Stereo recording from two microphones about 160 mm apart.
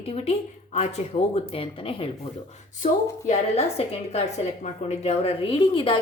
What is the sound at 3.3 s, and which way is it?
A woman's voice, 40° left (ahead or behind).